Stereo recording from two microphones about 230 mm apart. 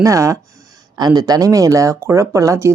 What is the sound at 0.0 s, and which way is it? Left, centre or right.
Speech, centre.